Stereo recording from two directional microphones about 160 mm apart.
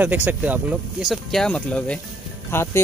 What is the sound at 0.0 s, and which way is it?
Speech, 10° right (ahead or behind).